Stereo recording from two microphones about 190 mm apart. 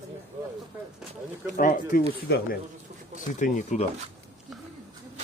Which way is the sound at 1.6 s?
45° left (ahead or behind).